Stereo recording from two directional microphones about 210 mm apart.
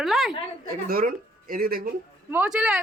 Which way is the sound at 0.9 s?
40° right (ahead or behind).